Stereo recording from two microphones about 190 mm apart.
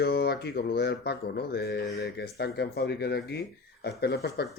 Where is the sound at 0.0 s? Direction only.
55° left (ahead or behind).